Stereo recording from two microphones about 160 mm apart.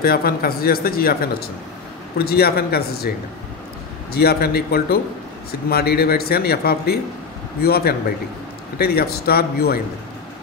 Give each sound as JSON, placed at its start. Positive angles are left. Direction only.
{"t": 0.0, "sound": "speech", "side_deg": 70}
{"t": 4.1, "sound": "a man's voice", "side_deg": 80}